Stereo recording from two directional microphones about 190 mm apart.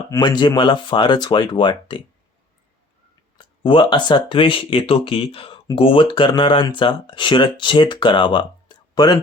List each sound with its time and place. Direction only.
0.1 s speech: 25° left (ahead or behind)
3.3 s speech: 25° left (ahead or behind)